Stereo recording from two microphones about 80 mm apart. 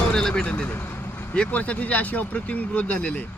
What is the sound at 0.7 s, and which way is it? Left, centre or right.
Vehicle, left.